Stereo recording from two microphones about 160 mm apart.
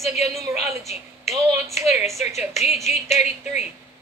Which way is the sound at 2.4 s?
45° left (ahead or behind).